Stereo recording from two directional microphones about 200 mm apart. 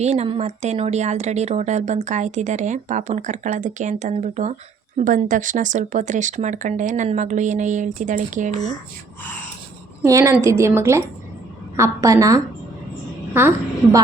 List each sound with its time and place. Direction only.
0.0 s speech: 35° right (ahead or behind)
10.0 s a woman's voice: 15° right (ahead or behind)